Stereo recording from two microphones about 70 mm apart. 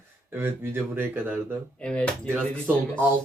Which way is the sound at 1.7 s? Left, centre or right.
Centre.